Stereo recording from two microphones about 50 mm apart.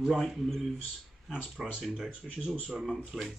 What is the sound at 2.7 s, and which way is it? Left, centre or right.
Speech, centre.